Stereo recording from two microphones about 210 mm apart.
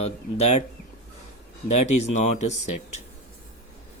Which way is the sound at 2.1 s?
35° left (ahead or behind).